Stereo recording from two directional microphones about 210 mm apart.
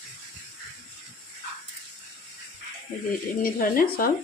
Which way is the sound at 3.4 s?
40° left (ahead or behind).